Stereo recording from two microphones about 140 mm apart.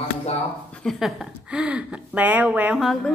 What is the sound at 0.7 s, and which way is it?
Speech, 5° left (ahead or behind).